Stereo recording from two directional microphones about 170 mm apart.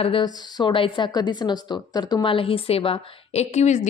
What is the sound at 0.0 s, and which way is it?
A woman's voice, 30° left (ahead or behind).